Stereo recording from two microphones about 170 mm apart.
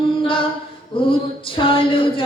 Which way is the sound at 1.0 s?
30° left (ahead or behind).